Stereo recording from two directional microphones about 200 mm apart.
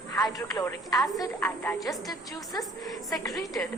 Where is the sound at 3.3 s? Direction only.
Centre (ahead or behind).